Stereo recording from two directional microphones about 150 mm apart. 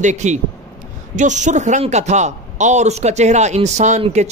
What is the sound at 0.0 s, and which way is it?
A man's voice, 50° right (ahead or behind).